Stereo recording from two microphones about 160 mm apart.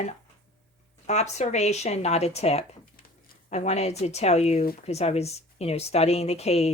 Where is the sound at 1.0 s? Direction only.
45° left (ahead or behind).